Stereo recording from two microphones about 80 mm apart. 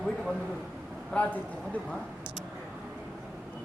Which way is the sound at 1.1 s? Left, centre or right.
Centre.